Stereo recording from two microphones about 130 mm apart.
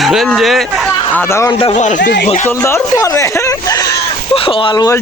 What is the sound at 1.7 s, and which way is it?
Speech, 70° left (ahead or behind).